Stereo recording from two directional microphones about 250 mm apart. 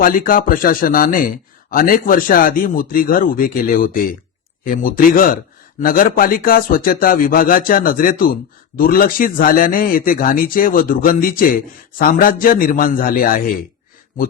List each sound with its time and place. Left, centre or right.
0.0 s speech: left